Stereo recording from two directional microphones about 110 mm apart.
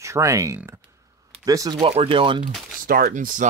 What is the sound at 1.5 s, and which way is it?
Speech, 30° right (ahead or behind).